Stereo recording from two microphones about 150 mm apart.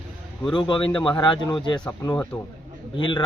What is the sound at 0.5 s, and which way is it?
A man's voice, 30° left (ahead or behind).